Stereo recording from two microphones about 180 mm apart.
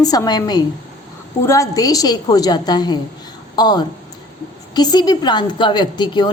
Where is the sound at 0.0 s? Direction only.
20° left (ahead or behind).